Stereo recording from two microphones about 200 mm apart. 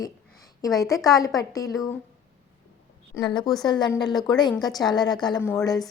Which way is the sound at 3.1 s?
20° left (ahead or behind).